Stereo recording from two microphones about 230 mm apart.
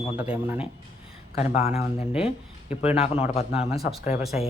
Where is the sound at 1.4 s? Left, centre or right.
Left.